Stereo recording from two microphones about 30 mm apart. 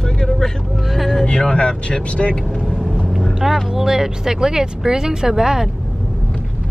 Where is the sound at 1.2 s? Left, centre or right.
Left.